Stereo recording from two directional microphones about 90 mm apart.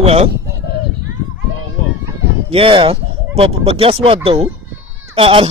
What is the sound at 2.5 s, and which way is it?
Speech, 80° right.